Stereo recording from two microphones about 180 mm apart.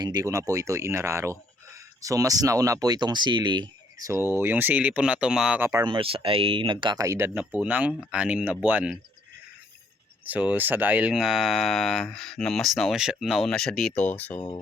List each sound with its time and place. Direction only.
0.0 s speech: 20° right (ahead or behind)
10.2 s speech: 10° right (ahead or behind); by 14.4 s 10° left (ahead or behind)